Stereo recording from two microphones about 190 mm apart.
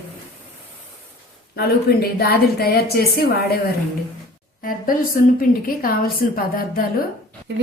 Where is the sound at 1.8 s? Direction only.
55° left (ahead or behind).